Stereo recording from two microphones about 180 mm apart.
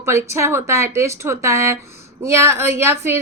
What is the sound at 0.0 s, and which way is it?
A woman's voice, 15° right (ahead or behind).